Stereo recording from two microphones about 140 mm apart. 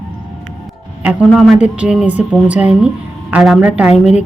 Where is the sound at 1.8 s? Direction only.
5° right (ahead or behind).